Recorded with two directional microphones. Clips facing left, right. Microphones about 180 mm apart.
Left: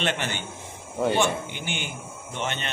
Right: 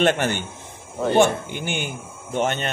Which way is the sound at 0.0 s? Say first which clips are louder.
Right 8 dB; 50° right (ahead or behind).